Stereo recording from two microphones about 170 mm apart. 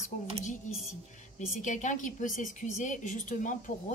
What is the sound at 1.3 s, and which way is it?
A woman's voice, 45° left (ahead or behind).